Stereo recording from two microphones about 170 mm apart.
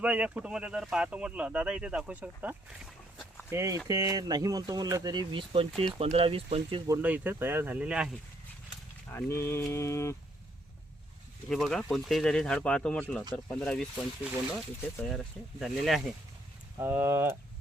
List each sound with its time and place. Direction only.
0.0 s speech: 5° right (ahead or behind)
3.5 s speech: 15° right (ahead or behind)
5.7 s speech: centre (ahead or behind)
6.1 s speech: 35° right (ahead or behind)
7.0 s speech: 10° right (ahead or behind)
9.0 s a sound: 15° left (ahead or behind)
11.4 s speech: centre (ahead or behind)
13.3 s a sound: 5° left (ahead or behind)
15.1 s speech: centre (ahead or behind)
16.7 s speech: 15° right (ahead or behind)